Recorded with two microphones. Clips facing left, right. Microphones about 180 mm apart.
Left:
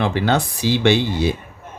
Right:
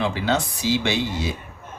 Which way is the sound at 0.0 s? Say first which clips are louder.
Left 4 dB; 65° left (ahead or behind).